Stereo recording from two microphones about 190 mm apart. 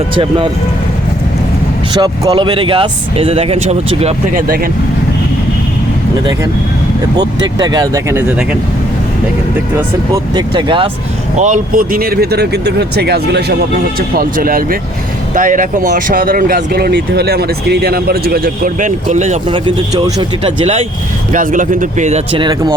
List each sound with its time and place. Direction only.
0.2 s speech: 25° right (ahead or behind)
1.9 s speech: 25° right (ahead or behind)
7.2 s speech: 20° right (ahead or behind)
10.3 s speech: 25° right (ahead or behind)
11.3 s speech: 40° right (ahead or behind); by 13.4 s 60° right (ahead or behind)
14.2 s speech: 50° right (ahead or behind)
19.6 s speech: 20° right (ahead or behind)
21.3 s speech: 45° right (ahead or behind); by 22.7 s 25° right (ahead or behind)